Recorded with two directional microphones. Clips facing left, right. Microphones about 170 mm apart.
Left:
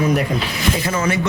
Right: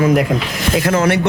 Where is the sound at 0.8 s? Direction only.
70° right (ahead or behind).